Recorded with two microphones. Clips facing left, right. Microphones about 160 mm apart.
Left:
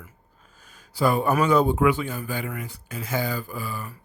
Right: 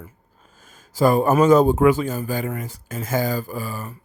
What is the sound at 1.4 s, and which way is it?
A man's voice, 40° right (ahead or behind).